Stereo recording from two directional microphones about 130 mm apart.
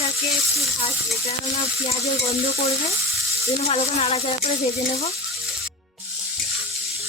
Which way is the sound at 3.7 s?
50° left (ahead or behind).